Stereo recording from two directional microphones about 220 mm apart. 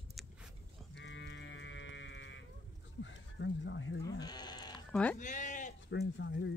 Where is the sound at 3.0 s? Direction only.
55° left (ahead or behind).